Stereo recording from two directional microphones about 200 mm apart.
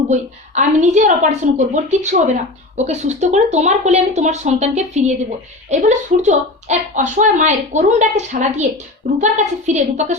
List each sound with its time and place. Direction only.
0.1 s a woman's voice: 35° right (ahead or behind)